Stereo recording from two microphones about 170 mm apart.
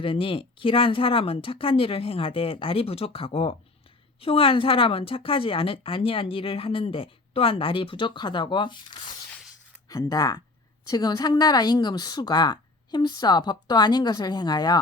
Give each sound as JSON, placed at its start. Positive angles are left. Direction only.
{"t": 0.0, "sound": "a woman's voice", "side_deg": 30}
{"t": 9.3, "sound": "a sound", "side_deg": -5}
{"t": 9.9, "sound": "speech", "side_deg": 20}